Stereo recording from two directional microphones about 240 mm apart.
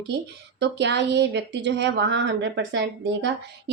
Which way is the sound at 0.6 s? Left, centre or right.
Right.